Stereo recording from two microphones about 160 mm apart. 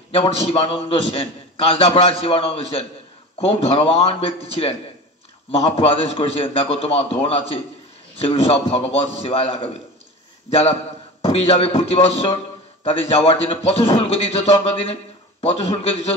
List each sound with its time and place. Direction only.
0.1 s a man's voice: 35° left (ahead or behind)
11.2 s a man's voice: 40° left (ahead or behind)